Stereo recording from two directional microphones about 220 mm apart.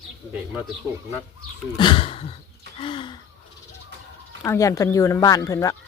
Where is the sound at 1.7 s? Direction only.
20° left (ahead or behind).